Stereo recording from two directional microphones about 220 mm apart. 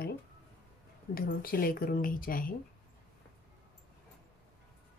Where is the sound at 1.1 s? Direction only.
40° left (ahead or behind).